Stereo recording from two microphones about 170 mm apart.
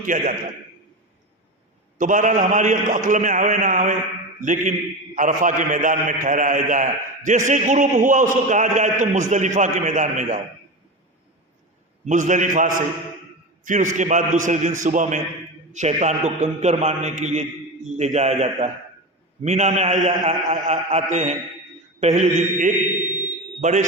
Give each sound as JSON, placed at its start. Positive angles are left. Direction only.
{"t": 0.0, "sound": "a man's voice", "side_deg": -50}
{"t": 2.0, "sound": "a man's voice", "side_deg": -50}
{"t": 12.0, "sound": "a man's voice", "side_deg": -45}